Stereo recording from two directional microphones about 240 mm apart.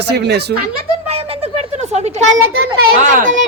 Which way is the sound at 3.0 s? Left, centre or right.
Right.